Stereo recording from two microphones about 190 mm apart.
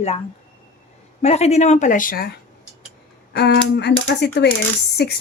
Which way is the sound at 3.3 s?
60° left (ahead or behind).